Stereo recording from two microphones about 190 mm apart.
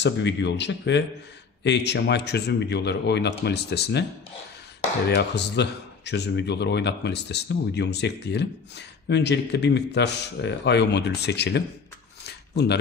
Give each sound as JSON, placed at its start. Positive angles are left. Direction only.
{"t": 0.0, "sound": "speech", "side_deg": 65}
{"t": 5.0, "sound": "speech", "side_deg": 60}